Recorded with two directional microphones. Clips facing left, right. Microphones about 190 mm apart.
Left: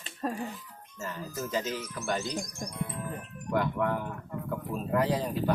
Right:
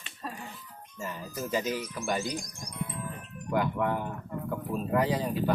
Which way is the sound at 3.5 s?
5° right (ahead or behind).